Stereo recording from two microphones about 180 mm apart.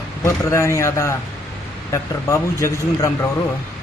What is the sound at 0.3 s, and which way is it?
A man's voice, 15° left (ahead or behind).